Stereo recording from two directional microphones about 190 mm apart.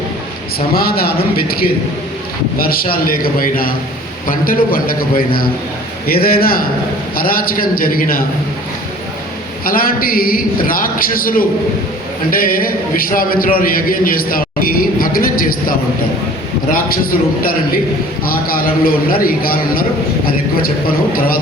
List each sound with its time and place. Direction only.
0.7 s a man's voice: 55° left (ahead or behind)
9.6 s a man's voice: 50° left (ahead or behind)
18.3 s a man's voice: 50° left (ahead or behind)